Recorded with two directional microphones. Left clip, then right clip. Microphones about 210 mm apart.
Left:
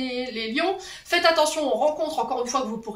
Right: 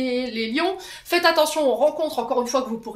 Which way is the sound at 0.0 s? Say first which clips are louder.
Right 4 dB; 50° right (ahead or behind).